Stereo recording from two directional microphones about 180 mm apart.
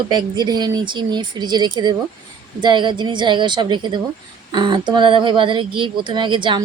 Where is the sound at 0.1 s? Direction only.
25° right (ahead or behind).